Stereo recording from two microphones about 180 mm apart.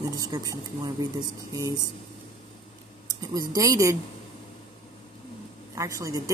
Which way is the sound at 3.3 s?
20° right (ahead or behind).